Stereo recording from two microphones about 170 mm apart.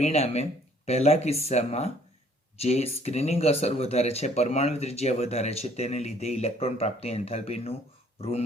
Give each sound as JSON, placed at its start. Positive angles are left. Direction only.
{"t": 0.0, "sound": "speech", "side_deg": 40}